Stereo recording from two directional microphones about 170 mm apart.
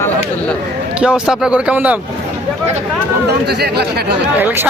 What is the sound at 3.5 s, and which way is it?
Speech, 75° right (ahead or behind).